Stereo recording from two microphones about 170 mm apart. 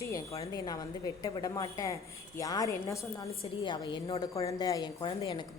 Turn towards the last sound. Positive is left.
turn(degrees=30)  # may be behind; listen again after turning